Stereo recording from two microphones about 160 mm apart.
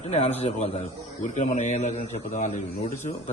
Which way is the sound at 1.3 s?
50° left (ahead or behind).